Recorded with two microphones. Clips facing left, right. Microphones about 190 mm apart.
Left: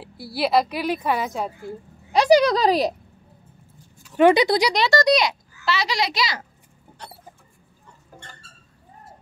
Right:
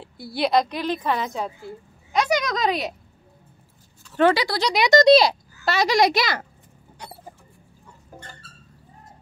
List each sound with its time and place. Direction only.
0.0 s a woman's voice: 5° left (ahead or behind)
2.1 s speech: 35° left (ahead or behind)
4.0 s speech: 15° left (ahead or behind)
4.7 s speech: 20° right (ahead or behind)
5.7 s a child's voice: 50° right (ahead or behind)